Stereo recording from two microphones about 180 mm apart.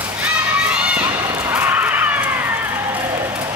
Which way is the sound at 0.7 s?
5° right (ahead or behind).